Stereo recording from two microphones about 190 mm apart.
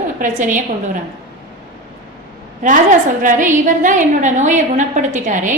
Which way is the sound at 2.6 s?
45° right (ahead or behind).